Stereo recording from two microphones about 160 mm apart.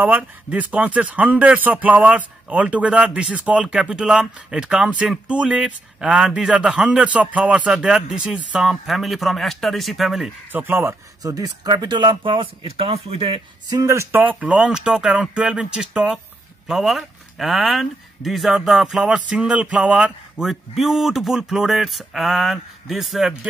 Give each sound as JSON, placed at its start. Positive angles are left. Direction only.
{"t": 0.0, "sound": "speech", "side_deg": -10}
{"t": 10.5, "sound": "speech", "side_deg": -15}
{"t": 13.7, "sound": "speech", "side_deg": -20}